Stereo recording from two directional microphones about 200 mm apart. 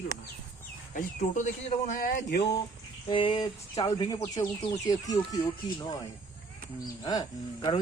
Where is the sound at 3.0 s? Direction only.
25° left (ahead or behind).